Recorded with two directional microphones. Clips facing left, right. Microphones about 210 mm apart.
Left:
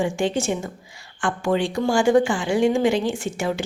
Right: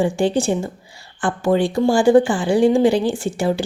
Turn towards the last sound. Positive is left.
turn(degrees=-35)  # may be behind; listen again after turning